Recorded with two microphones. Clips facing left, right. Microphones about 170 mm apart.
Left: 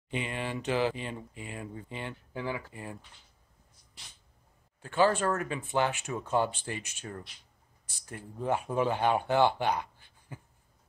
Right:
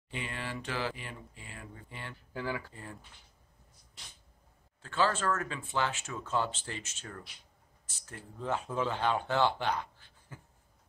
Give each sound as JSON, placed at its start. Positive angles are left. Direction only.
{"t": 0.1, "sound": "speech", "side_deg": 20}
{"t": 4.8, "sound": "speech", "side_deg": 15}
{"t": 9.6, "sound": "a sound", "side_deg": 15}